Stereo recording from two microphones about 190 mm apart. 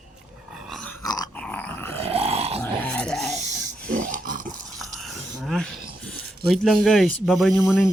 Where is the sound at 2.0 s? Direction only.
30° right (ahead or behind).